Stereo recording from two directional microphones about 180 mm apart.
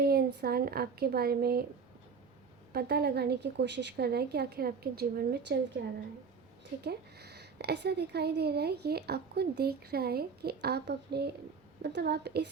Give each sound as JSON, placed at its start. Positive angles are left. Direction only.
{"t": 0.0, "sound": "speech", "side_deg": -60}
{"t": 2.7, "sound": "speech", "side_deg": -60}
{"t": 5.8, "sound": "a woman's voice", "side_deg": -75}
{"t": 6.8, "sound": "a woman's voice", "side_deg": -65}